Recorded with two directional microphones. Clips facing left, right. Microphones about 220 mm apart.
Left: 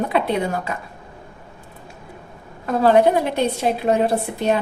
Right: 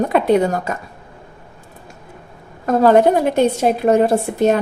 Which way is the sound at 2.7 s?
45° right (ahead or behind).